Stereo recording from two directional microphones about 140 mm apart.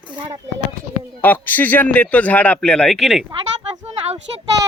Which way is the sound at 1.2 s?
15° left (ahead or behind).